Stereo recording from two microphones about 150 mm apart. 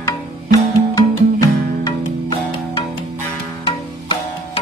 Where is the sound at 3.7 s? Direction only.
35° left (ahead or behind).